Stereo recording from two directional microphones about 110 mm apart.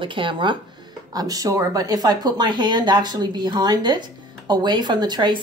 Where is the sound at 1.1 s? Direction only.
35° right (ahead or behind).